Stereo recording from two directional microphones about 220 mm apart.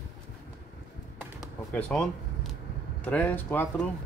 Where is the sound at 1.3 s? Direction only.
5° left (ahead or behind).